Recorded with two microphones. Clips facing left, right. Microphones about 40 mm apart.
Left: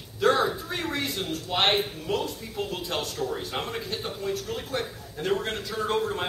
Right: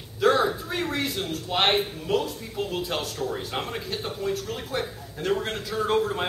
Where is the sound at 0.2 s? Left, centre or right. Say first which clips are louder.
Right 1 dB; centre.